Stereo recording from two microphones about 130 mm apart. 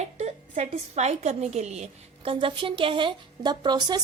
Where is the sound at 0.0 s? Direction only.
60° right (ahead or behind).